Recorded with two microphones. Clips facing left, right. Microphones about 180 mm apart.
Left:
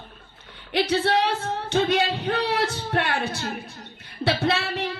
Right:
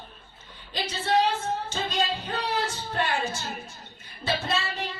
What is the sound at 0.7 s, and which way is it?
Singing, 65° left (ahead or behind).